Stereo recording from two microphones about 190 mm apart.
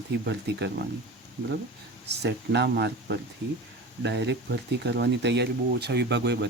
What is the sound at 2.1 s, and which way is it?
Speech, 65° right (ahead or behind).